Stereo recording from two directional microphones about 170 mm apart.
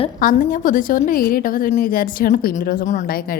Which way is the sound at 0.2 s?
50° left (ahead or behind).